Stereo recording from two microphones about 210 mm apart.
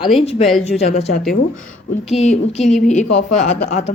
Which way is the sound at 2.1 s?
30° left (ahead or behind).